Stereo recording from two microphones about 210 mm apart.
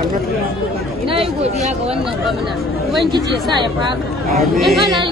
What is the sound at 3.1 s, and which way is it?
Speech, 20° right (ahead or behind).